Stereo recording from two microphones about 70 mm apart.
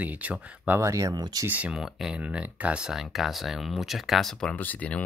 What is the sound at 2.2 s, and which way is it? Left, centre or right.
Speech, centre.